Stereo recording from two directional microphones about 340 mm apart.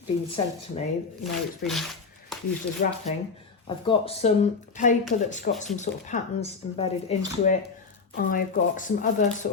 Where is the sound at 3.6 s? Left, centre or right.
Centre.